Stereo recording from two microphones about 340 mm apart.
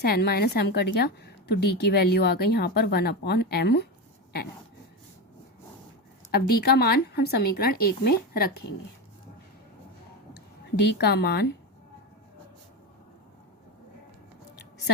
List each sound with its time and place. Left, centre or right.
0.0 s a woman's voice: left
6.3 s a woman's voice: left
10.9 s a woman's voice: left